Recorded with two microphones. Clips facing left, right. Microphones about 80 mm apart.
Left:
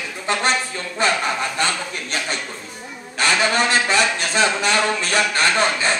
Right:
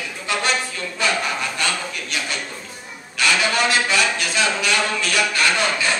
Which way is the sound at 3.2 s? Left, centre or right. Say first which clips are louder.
Left 1 dB; left.